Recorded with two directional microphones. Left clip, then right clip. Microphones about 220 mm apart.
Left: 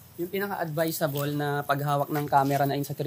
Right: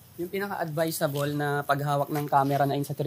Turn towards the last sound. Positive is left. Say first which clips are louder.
# even
turn(degrees=-25)  # may be behind; listen again after turning